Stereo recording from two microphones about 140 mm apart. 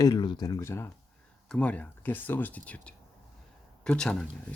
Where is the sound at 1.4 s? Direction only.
10° left (ahead or behind).